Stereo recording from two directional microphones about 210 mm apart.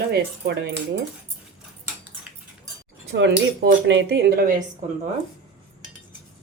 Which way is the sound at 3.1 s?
60° right (ahead or behind).